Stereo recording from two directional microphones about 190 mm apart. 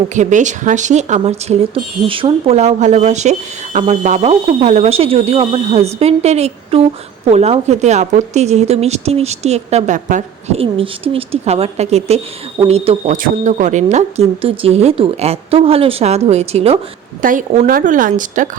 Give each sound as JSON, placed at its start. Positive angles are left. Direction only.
{"t": 0.1, "sound": "speech", "side_deg": -40}
{"t": 17.2, "sound": "speech", "side_deg": -45}